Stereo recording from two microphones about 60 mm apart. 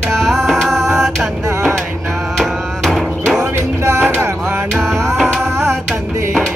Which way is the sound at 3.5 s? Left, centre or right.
Right.